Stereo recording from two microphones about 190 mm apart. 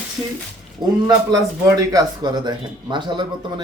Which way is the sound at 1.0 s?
20° right (ahead or behind).